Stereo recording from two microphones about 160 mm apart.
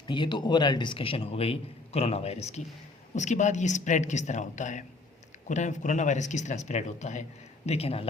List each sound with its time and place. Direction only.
0.1 s a man's voice: 30° left (ahead or behind)